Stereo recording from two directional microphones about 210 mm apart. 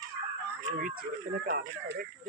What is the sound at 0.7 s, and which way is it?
Speech, 45° right (ahead or behind).